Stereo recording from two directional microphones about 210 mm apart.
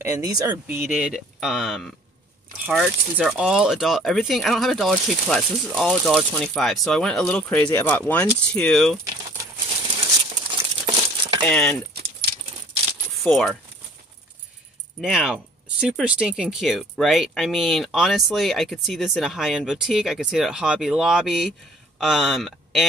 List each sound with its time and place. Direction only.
0.0 s speech: 15° right (ahead or behind)
0.7 s speech: 5° right (ahead or behind)
10.3 s coin: 25° right (ahead or behind)
11.4 s speech: 5° left (ahead or behind)
13.2 s speech: centre (ahead or behind)
15.0 s speech: centre (ahead or behind)